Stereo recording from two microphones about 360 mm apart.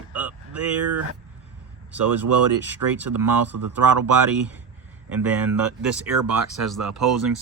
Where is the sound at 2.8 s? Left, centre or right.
Right.